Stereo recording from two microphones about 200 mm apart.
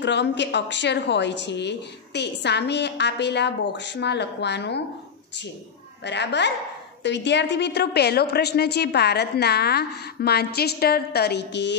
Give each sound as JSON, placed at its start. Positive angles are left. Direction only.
{"t": 0.0, "sound": "a woman's voice", "side_deg": 60}
{"t": 6.0, "sound": "a woman's voice", "side_deg": 60}